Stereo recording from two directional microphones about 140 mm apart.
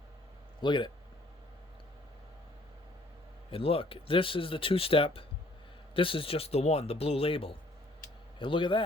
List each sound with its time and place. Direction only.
0.6 s speech: 35° left (ahead or behind)
3.5 s speech: 40° left (ahead or behind)